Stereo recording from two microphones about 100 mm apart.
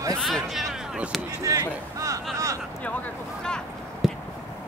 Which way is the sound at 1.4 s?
35° right (ahead or behind).